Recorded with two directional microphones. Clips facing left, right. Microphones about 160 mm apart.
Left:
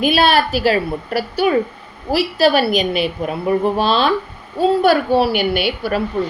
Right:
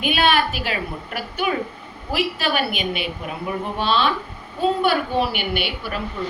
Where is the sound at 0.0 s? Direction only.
35° left (ahead or behind).